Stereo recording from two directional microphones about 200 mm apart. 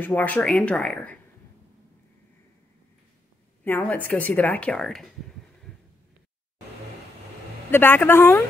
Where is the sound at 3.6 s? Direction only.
10° left (ahead or behind).